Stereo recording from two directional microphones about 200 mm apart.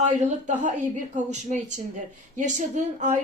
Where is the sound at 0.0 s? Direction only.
35° right (ahead or behind).